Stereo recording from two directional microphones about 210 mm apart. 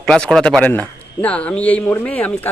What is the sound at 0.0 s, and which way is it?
A man's voice, centre (ahead or behind).